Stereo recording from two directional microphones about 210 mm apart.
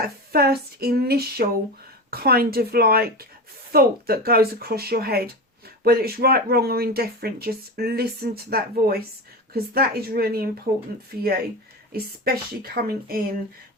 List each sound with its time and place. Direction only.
0.3 s speech: 50° right (ahead or behind)